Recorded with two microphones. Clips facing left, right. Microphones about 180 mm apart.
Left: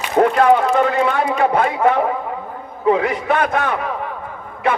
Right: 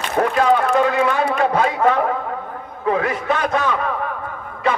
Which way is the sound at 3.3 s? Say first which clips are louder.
Left 1 dB; 60° left (ahead or behind).